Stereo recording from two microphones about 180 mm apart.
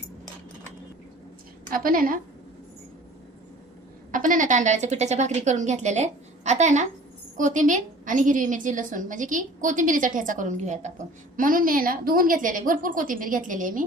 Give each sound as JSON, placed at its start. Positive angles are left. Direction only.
{"t": 1.7, "sound": "a woman's voice", "side_deg": -50}
{"t": 4.1, "sound": "a woman's voice", "side_deg": -45}